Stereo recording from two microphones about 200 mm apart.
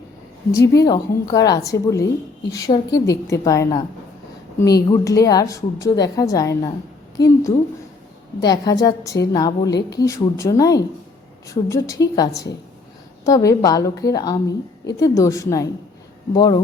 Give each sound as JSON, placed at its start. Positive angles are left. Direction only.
{"t": 0.5, "sound": "a woman's voice", "side_deg": 15}